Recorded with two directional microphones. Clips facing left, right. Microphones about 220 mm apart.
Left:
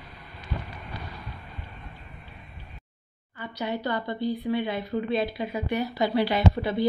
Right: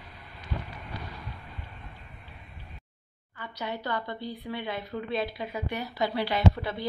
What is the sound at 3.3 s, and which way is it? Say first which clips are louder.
Speech: left 5 dB; 15° left (ahead or behind).